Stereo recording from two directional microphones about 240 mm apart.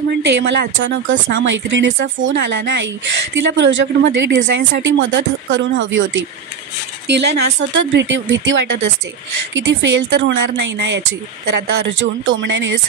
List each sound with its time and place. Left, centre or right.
0.2 s speech: right